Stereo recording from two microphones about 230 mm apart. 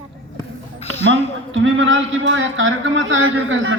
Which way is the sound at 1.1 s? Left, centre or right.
Right.